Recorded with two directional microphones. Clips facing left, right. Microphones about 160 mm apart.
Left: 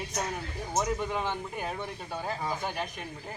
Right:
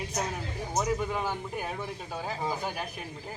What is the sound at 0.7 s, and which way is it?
Speech, 5° right (ahead or behind).